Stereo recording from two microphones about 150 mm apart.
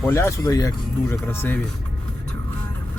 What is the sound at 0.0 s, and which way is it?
Speech, 20° left (ahead or behind).